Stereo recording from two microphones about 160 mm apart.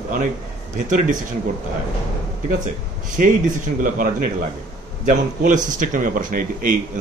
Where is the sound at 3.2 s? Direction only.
55° right (ahead or behind).